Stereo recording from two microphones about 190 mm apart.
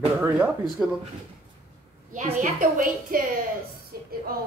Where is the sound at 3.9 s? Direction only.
50° right (ahead or behind).